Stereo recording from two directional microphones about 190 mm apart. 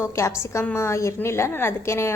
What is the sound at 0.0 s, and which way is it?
A woman's voice, 15° left (ahead or behind).